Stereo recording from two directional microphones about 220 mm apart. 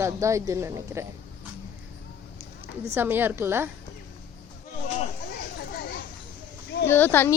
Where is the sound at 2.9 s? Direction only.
10° right (ahead or behind).